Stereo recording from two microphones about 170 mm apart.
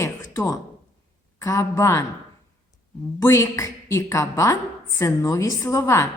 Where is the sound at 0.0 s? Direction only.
20° left (ahead or behind).